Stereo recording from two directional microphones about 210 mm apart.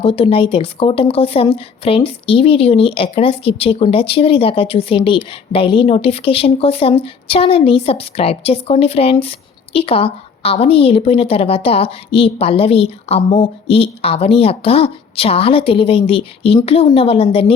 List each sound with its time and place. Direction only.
0.0 s speech: 25° left (ahead or behind)